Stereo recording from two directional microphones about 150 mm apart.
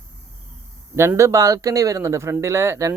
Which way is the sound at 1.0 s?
20° right (ahead or behind).